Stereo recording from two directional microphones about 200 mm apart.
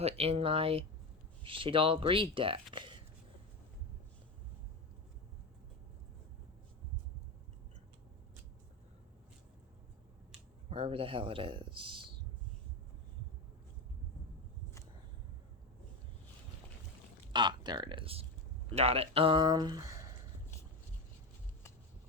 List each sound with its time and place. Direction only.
0.0 s speech: 30° right (ahead or behind)
10.7 s speech: 30° right (ahead or behind)
17.3 s speech: 20° right (ahead or behind)